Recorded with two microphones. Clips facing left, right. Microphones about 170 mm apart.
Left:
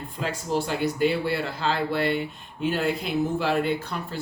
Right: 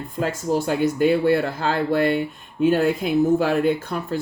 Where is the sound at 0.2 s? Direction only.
50° right (ahead or behind).